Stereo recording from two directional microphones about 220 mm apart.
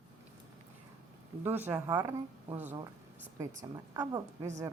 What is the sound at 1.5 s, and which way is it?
Speech, 10° right (ahead or behind).